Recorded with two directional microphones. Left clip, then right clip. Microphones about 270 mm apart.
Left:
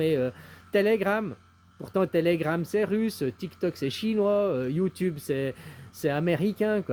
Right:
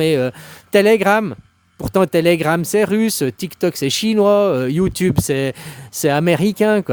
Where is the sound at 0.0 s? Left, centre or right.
Right.